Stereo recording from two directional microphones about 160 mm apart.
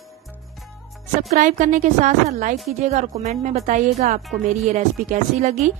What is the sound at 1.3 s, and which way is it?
A woman's voice, 50° right (ahead or behind).